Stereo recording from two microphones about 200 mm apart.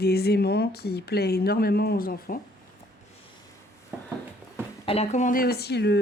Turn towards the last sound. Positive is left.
turn(degrees=55)  # may be behind; listen again after turning